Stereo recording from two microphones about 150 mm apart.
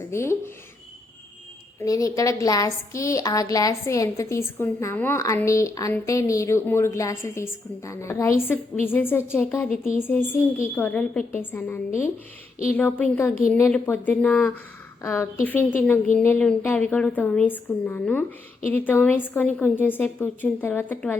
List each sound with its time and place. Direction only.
0.1 s a woman's voice: 20° left (ahead or behind)
1.8 s a woman's voice: 20° left (ahead or behind)